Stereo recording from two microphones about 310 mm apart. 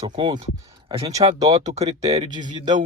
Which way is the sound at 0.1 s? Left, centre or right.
Centre.